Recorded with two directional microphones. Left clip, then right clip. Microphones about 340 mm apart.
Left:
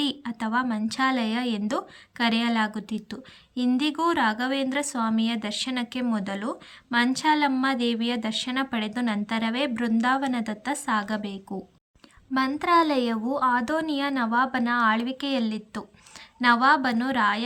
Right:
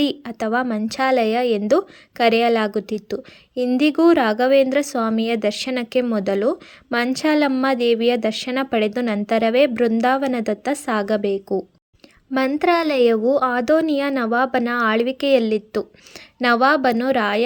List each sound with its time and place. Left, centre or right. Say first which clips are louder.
0.0 s speech: right 7 dB; centre